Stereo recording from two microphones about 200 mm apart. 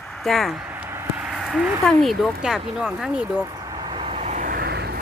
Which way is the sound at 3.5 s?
15° right (ahead or behind).